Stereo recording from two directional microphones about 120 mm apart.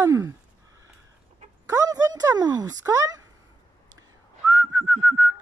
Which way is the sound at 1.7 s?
30° right (ahead or behind).